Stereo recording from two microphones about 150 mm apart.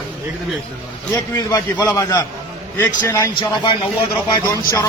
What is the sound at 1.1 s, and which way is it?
A man's voice, 20° left (ahead or behind).